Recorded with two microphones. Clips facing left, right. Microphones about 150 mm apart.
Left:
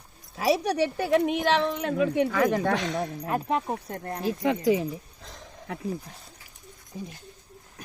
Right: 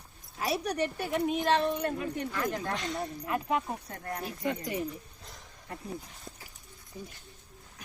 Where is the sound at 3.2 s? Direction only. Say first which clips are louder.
Left 2 dB; 40° left (ahead or behind).